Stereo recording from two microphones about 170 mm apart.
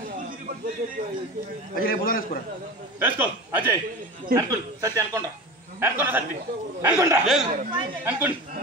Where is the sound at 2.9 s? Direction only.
10° right (ahead or behind).